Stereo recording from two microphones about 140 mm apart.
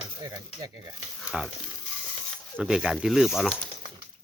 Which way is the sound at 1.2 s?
5° right (ahead or behind).